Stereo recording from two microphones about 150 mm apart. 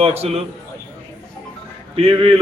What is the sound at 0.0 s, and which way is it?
Speech, 40° right (ahead or behind).